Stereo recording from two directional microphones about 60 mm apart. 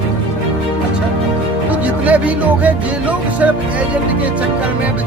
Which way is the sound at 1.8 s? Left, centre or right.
Right.